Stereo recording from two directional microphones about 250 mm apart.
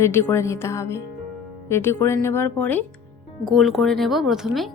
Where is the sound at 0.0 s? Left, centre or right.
Centre.